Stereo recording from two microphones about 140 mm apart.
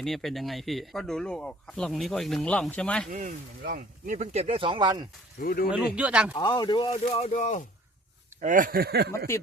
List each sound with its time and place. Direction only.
0.0 s speech: centre (ahead or behind)
3.1 s speech: 65° right (ahead or behind); by 5.0 s 30° right (ahead or behind)
5.4 s speech: 90° left
5.7 s speech: 10° right (ahead or behind)
6.3 s speech: 30° left (ahead or behind); by 7.6 s 60° left (ahead or behind)
8.4 s speech: 70° right (ahead or behind); by 9.0 s 85° right
9.1 s speech: 20° left (ahead or behind)